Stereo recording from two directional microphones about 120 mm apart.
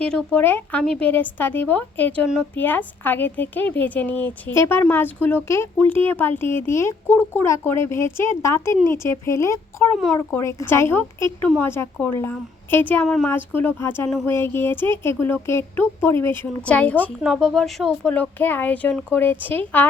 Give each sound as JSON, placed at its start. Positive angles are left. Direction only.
{"t": 0.0, "sound": "a woman's voice", "side_deg": 5}
{"t": 9.9, "sound": "speech", "side_deg": 0}
{"t": 10.3, "sound": "a woman's voice", "side_deg": 20}
{"t": 17.2, "sound": "speech", "side_deg": 0}